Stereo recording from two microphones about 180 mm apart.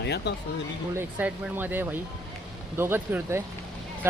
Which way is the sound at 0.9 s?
10° right (ahead or behind).